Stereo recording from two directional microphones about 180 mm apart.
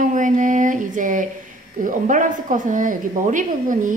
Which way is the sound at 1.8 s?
45° right (ahead or behind).